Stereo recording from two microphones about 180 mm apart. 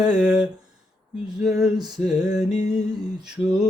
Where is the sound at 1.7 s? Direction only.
25° right (ahead or behind).